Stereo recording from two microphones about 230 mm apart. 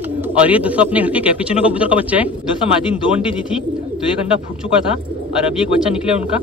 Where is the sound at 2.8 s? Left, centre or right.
Left.